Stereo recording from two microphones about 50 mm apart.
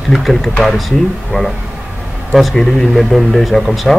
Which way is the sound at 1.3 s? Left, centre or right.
Left.